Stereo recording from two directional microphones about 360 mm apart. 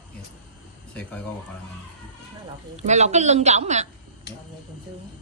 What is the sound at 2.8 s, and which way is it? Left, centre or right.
A woman's voice, centre.